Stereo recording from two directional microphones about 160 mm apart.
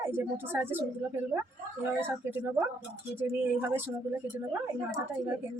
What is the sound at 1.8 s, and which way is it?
Speech, 15° right (ahead or behind).